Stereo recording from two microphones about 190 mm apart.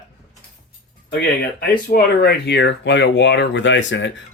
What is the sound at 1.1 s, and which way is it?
Speech, 60° left (ahead or behind).